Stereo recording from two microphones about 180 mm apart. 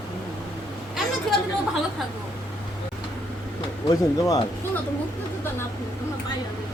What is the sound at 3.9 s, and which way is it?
Speech, 20° left (ahead or behind).